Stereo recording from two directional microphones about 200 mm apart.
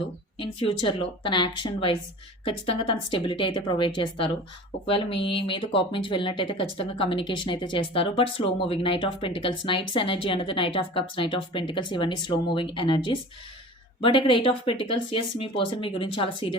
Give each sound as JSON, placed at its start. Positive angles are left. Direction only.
{"t": 0.3, "sound": "speech", "side_deg": 25}